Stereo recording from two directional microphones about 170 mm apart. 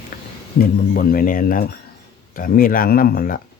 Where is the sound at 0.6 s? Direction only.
60° left (ahead or behind).